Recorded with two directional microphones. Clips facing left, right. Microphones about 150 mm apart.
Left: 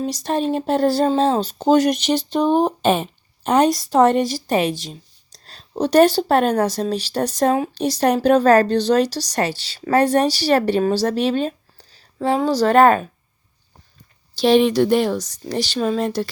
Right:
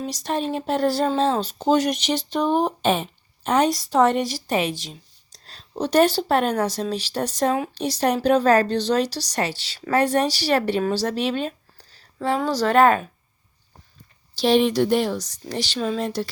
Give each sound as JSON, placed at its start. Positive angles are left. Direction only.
{"t": 0.0, "sound": "speech", "side_deg": 35}
{"t": 14.3, "sound": "speech", "side_deg": 65}